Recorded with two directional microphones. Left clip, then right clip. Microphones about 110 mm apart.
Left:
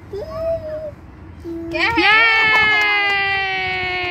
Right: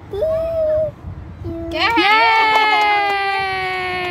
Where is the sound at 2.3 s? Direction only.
15° right (ahead or behind).